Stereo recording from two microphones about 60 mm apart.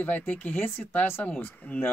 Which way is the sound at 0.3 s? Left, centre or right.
Left.